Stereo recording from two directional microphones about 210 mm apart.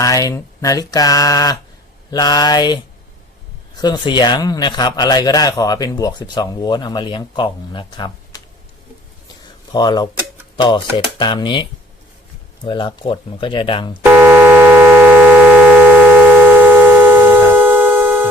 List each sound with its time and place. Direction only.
0.0 s a man's voice: 15° left (ahead or behind)
9.7 s a man's voice: 20° left (ahead or behind)
14.0 s a sound: 10° right (ahead or behind)